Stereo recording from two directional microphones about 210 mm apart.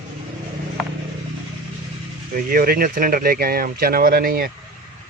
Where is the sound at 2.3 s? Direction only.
45° right (ahead or behind).